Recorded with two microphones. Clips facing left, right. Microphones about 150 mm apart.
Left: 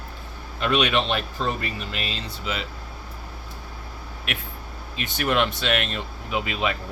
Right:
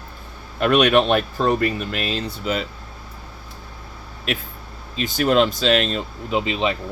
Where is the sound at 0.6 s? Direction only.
50° right (ahead or behind).